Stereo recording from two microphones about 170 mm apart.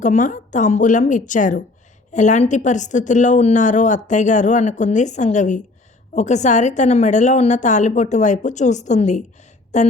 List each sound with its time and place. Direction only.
0.0 s a woman's voice: 50° left (ahead or behind)